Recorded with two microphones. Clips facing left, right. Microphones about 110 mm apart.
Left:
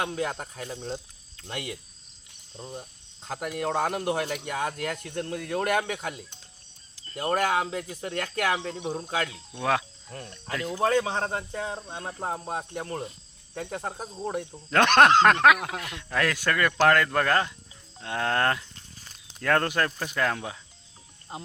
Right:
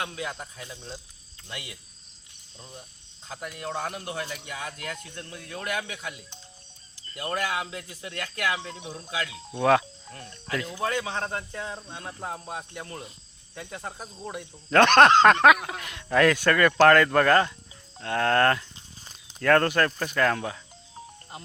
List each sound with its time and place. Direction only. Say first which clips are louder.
0.2 s speech: left 4 dB; 45° left (ahead or behind)
3.2 s speech: left 6 dB; 60° left (ahead or behind); by 9.3 s 45° left (ahead or behind)
9.6 s speech: right 5 dB; centre (ahead or behind)
10.8 s speech: left 6 dB; 35° left (ahead or behind)
12.2 s speech: left 4 dB; 40° left (ahead or behind)
14.7 s speech: right 2 dB; 10° left (ahead or behind)